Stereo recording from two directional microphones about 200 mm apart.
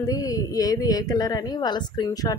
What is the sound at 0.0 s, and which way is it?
Speech, 15° left (ahead or behind).